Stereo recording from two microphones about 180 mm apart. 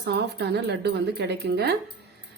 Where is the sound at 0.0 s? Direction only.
65° right (ahead or behind).